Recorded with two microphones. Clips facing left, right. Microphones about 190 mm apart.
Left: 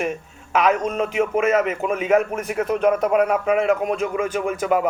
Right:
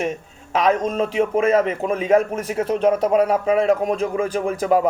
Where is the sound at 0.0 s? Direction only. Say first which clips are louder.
Right 1 dB; 30° right (ahead or behind).